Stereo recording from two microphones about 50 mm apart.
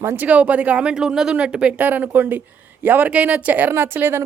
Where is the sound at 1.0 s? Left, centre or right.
Centre.